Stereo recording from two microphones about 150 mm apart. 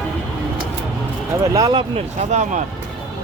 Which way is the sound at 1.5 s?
30° right (ahead or behind).